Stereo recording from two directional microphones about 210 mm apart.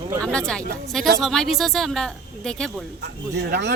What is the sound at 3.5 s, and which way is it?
Speech, 50° right (ahead or behind).